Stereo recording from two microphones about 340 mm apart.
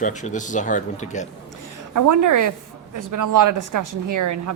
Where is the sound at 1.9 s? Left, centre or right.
Right.